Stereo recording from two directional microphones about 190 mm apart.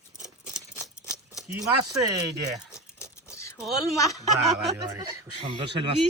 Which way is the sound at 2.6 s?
5° right (ahead or behind).